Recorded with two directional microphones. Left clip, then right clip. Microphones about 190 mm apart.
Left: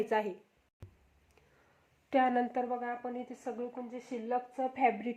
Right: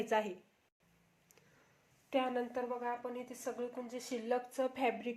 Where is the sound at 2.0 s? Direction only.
35° left (ahead or behind).